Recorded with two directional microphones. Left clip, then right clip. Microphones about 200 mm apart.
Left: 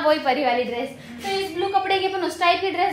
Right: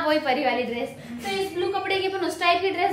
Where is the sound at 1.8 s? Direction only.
5° left (ahead or behind).